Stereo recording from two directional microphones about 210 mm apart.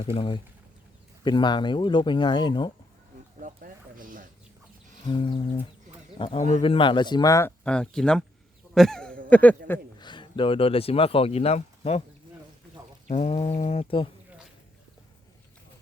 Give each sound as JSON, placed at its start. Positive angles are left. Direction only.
{"t": 0.0, "sound": "speech", "side_deg": 25}
{"t": 3.4, "sound": "speech", "side_deg": -40}
{"t": 5.0, "sound": "speech", "side_deg": 25}
{"t": 8.7, "sound": "a sound", "side_deg": 0}
{"t": 9.3, "sound": "speech", "side_deg": 5}
{"t": 10.0, "sound": "speech", "side_deg": 20}
{"t": 13.1, "sound": "speech", "side_deg": 30}